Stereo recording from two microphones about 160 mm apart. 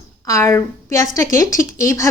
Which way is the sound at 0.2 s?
20° left (ahead or behind).